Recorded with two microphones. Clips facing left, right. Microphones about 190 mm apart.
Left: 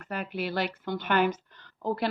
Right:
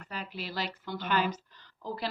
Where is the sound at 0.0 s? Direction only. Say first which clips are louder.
Left 7 dB; 55° left (ahead or behind).